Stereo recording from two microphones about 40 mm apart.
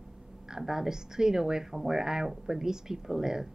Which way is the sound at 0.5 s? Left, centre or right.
Centre.